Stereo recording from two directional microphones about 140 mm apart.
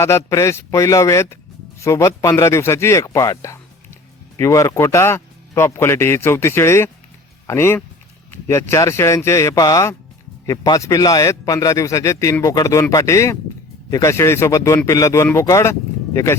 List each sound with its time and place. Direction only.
0.0 s speech: 20° left (ahead or behind)